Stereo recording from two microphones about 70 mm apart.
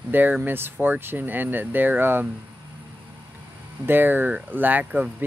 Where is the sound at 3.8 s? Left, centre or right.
Right.